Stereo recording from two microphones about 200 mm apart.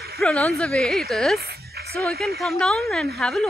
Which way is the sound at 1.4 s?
55° right (ahead or behind).